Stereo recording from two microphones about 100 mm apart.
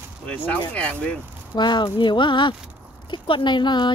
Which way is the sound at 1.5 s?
50° left (ahead or behind).